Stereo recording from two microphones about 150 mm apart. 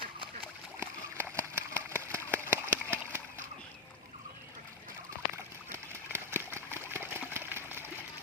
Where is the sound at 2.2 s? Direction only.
15° right (ahead or behind).